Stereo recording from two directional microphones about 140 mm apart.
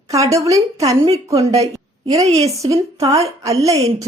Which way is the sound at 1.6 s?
25° right (ahead or behind).